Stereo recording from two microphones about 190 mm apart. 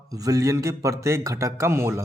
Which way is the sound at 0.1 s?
20° right (ahead or behind).